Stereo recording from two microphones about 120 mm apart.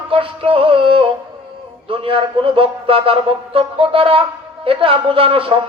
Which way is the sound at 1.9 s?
50° right (ahead or behind).